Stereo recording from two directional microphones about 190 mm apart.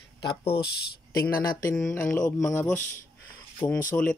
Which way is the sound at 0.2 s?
25° left (ahead or behind).